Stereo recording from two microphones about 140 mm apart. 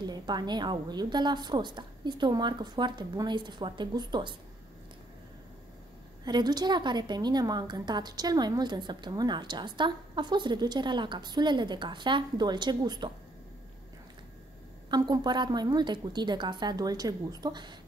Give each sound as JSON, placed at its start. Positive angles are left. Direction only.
{"t": 0.0, "sound": "a woman's voice", "side_deg": -30}
{"t": 6.2, "sound": "a woman's voice", "side_deg": -30}
{"t": 14.9, "sound": "a woman's voice", "side_deg": -30}